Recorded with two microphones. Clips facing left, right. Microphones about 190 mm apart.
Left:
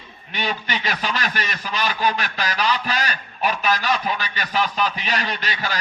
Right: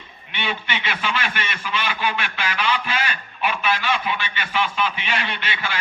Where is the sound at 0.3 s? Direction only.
40° left (ahead or behind).